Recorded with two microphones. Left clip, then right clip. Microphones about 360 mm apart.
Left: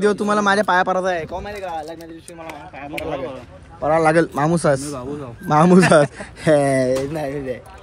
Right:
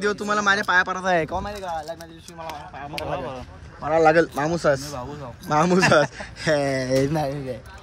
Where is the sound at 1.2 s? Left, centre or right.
Right.